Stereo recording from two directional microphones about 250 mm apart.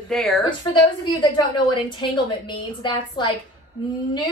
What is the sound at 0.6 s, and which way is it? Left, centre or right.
A woman's voice, centre.